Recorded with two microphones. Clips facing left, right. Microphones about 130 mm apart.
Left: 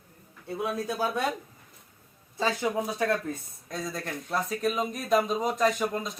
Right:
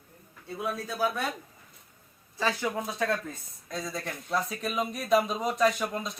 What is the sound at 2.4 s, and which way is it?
Speech, 20° left (ahead or behind).